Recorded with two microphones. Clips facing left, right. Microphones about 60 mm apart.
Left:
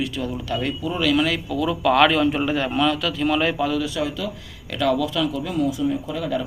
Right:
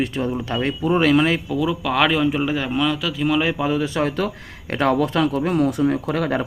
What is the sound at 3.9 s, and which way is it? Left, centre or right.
Speech, right.